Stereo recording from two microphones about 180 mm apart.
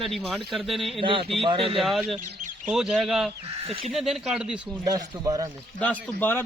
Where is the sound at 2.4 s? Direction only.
45° right (ahead or behind).